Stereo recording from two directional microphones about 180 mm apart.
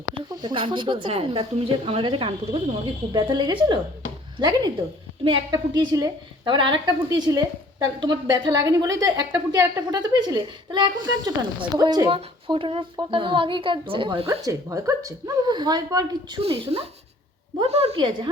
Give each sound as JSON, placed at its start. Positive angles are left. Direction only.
{"t": 0.3, "sound": "a woman's voice", "side_deg": -25}
{"t": 14.3, "sound": "a woman's voice", "side_deg": -20}
{"t": 16.4, "sound": "a woman's voice", "side_deg": -35}